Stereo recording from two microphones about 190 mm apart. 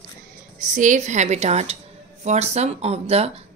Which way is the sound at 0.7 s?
40° right (ahead or behind).